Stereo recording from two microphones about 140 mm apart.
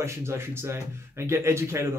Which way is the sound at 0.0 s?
20° right (ahead or behind).